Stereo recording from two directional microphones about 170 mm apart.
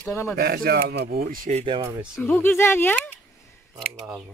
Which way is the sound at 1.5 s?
35° right (ahead or behind).